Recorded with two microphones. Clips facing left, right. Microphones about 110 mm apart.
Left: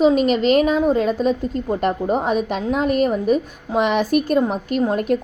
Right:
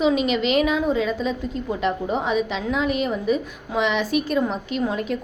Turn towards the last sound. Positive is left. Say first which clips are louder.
# left 5 dB
turn(degrees=50)  # may be behind; listen again after turning